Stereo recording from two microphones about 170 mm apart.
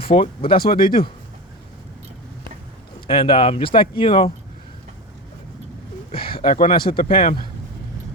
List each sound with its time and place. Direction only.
0.0 s speech: 30° left (ahead or behind)
0.5 s speech: 60° left (ahead or behind)
3.1 s speech: 30° left (ahead or behind)
6.1 s speech: 30° left (ahead or behind)
6.9 s speech: 60° left (ahead or behind)